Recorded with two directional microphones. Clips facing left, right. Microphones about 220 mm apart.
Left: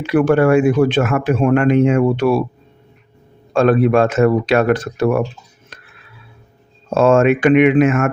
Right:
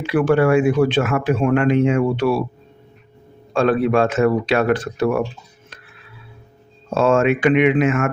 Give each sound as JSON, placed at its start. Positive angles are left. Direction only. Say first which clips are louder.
{"t": 0.0, "sound": "speech", "louder": "left 3 dB", "side_deg": 45}
{"t": 3.5, "sound": "speech", "louder": "left 4 dB", "side_deg": 45}
{"t": 6.9, "sound": "speech", "louder": "left 4 dB", "side_deg": 50}